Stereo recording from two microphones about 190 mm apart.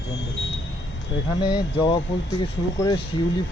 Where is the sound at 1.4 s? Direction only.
25° left (ahead or behind).